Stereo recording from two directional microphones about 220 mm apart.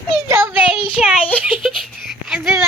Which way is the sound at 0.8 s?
25° left (ahead or behind).